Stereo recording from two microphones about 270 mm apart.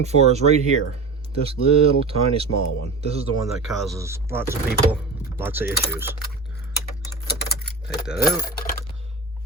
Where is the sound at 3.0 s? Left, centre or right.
Right.